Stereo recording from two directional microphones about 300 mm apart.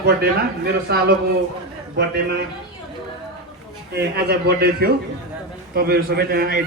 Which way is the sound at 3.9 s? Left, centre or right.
Right.